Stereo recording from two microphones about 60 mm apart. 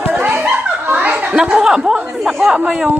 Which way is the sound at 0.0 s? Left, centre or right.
Right.